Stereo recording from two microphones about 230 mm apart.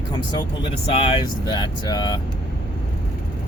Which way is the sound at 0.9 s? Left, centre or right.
Left.